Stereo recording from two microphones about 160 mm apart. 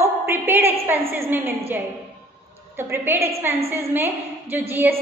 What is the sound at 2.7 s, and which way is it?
A woman's voice, 15° right (ahead or behind).